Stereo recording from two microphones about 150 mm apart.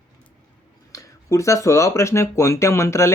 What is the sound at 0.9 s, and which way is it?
Speech, 20° left (ahead or behind).